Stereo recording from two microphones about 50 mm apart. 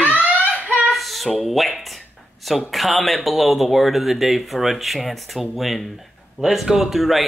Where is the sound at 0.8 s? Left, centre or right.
Centre.